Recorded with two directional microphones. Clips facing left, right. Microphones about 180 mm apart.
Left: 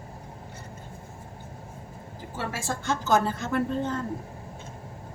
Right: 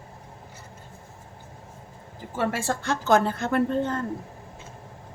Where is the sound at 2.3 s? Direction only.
60° right (ahead or behind).